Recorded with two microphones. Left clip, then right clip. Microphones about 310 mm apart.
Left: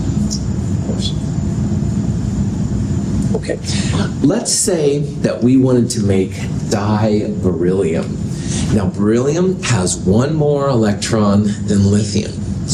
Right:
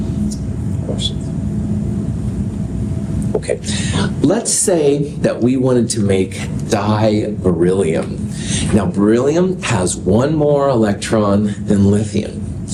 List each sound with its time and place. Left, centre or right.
4.2 s speech: right
9.0 s speech: right